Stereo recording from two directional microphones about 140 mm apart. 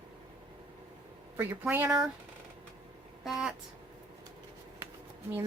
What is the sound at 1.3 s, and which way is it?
Speech, 15° right (ahead or behind).